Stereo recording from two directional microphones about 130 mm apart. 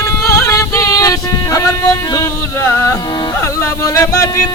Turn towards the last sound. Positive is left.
turn(degrees=25)  # may be behind; listen again after turning